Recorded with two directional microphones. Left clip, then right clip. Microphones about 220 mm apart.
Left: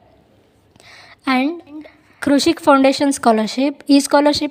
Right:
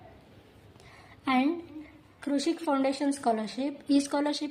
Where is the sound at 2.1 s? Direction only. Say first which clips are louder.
Left 14 dB; 45° left (ahead or behind).